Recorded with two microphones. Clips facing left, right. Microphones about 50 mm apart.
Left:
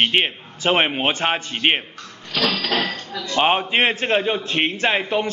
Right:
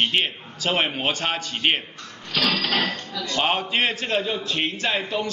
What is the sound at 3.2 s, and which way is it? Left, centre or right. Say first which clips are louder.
A man's voice: left 5 dB; left.